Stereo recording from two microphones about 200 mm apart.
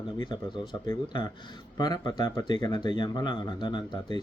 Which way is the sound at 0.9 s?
20° left (ahead or behind).